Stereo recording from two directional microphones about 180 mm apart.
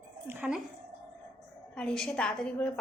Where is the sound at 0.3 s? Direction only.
10° right (ahead or behind).